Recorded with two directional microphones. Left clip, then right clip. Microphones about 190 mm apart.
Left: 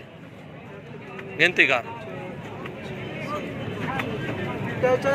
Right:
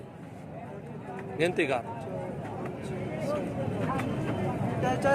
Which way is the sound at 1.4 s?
5° right (ahead or behind).